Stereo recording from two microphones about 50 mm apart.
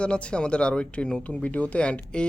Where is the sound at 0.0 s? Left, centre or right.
Left.